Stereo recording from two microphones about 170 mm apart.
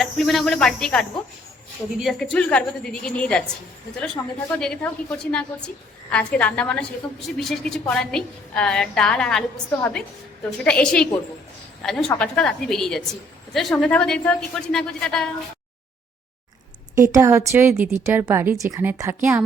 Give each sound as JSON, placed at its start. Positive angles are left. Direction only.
{"t": 0.0, "sound": "a woman's voice", "side_deg": 0}
{"t": 10.6, "sound": "a woman's voice", "side_deg": 5}
{"t": 16.9, "sound": "a woman's voice", "side_deg": -20}